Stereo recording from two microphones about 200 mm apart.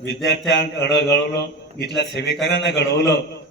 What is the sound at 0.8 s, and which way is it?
A man's voice, 60° left (ahead or behind).